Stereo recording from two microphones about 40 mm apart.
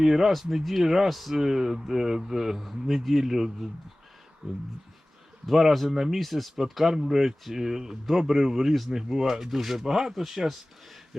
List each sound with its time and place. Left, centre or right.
0.0 s speech: centre
4.4 s speech: right
5.5 s speech: centre